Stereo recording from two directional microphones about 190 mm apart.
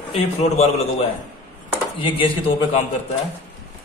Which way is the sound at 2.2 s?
35° left (ahead or behind).